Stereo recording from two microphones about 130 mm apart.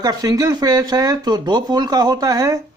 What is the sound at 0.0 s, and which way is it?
Speech, 30° right (ahead or behind).